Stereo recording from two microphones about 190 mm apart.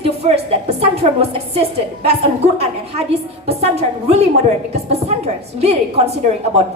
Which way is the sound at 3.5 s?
35° right (ahead or behind).